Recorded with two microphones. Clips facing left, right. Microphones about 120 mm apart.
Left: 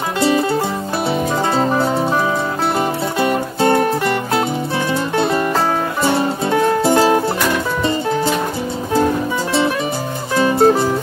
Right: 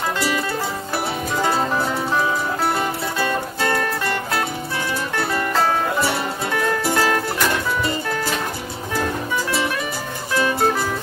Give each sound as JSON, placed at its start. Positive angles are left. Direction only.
{"t": 0.2, "sound": "music", "side_deg": 25}
{"t": 10.3, "sound": "music", "side_deg": 25}